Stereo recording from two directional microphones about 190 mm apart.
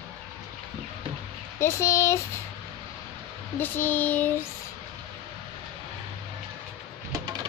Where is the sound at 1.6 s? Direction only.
15° left (ahead or behind).